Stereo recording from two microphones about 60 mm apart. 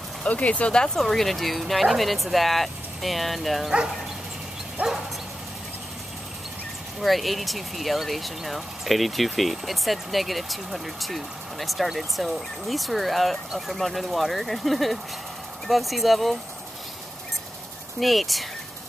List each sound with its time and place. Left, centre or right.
0.2 s speech: left
0.9 s speech: centre
4.8 s dog: right
7.0 s speech: centre
18.0 s speech: centre